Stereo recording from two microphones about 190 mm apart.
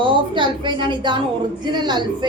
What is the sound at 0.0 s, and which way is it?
A woman's voice, 25° right (ahead or behind).